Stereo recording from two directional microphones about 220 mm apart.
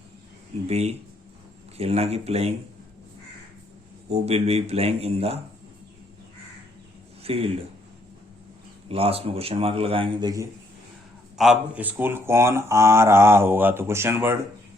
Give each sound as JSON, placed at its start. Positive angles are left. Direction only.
{"t": 0.7, "sound": "a man's voice", "side_deg": -30}
{"t": 4.1, "sound": "a man's voice", "side_deg": -30}
{"t": 7.2, "sound": "speech", "side_deg": -25}
{"t": 8.9, "sound": "a man's voice", "side_deg": -25}
{"t": 11.3, "sound": "speech", "side_deg": -5}